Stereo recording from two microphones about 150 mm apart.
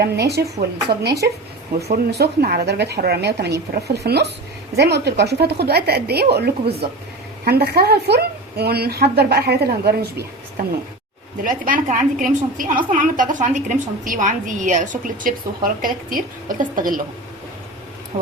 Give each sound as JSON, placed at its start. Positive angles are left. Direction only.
{"t": 0.0, "sound": "a woman's voice", "side_deg": -90}
{"t": 11.4, "sound": "a woman's voice", "side_deg": -65}